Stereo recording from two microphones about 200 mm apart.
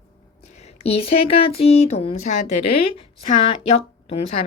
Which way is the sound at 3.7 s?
30° left (ahead or behind).